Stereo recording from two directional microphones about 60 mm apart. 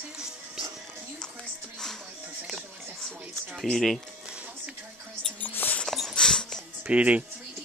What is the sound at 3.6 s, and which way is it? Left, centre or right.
Speech, centre.